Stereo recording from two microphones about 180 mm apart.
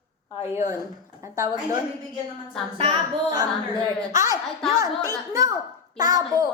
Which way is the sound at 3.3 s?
20° right (ahead or behind).